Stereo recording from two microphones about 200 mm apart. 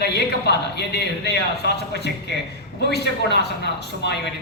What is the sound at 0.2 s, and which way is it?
A man's voice, 55° left (ahead or behind).